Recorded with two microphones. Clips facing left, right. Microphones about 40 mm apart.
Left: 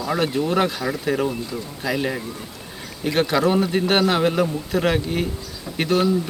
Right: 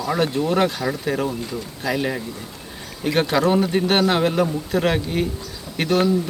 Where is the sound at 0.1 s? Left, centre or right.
Centre.